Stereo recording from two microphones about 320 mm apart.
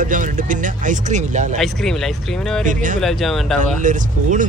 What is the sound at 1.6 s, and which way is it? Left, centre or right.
Speech, centre.